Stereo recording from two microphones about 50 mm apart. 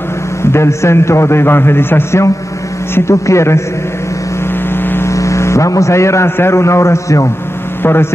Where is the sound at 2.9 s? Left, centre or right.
Left.